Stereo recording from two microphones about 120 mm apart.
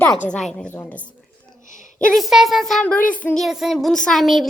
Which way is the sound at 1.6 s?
90° left.